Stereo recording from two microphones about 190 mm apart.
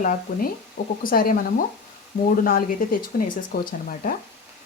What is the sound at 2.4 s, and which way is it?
Speech, 50° left (ahead or behind).